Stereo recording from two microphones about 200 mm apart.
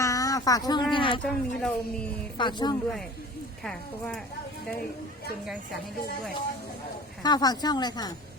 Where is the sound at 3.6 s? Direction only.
Centre (ahead or behind).